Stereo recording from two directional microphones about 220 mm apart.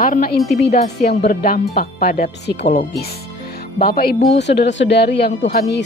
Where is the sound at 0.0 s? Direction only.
40° left (ahead or behind).